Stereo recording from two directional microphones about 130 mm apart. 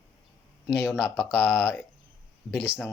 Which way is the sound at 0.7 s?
5° right (ahead or behind).